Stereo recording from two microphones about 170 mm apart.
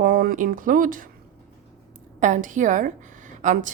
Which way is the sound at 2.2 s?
50° right (ahead or behind).